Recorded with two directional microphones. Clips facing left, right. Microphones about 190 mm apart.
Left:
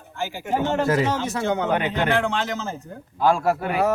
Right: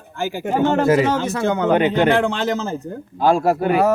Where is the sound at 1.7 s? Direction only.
25° right (ahead or behind).